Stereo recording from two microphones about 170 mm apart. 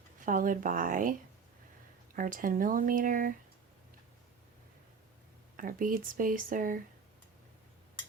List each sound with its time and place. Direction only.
0.3 s speech: 50° right (ahead or behind)
2.1 s speech: 50° right (ahead or behind)
5.5 s speech: 55° right (ahead or behind)